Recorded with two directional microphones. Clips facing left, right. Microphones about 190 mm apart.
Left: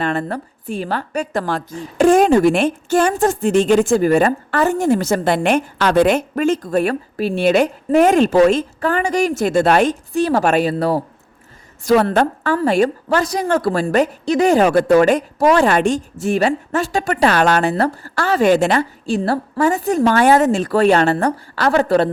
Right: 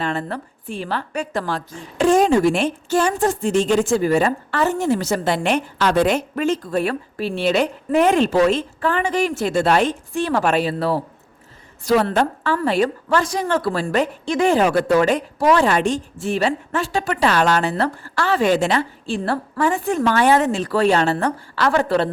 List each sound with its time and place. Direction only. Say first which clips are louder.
0.0 s a woman's voice: left 4 dB; 55° left (ahead or behind)
0.3 s a woman's voice: left 4 dB; 45° left (ahead or behind)
10.1 s a woman's voice: left 4 dB; 40° left (ahead or behind); by 21.2 s 55° left (ahead or behind)
21.2 s a woman's voice: left 2 dB; 40° left (ahead or behind)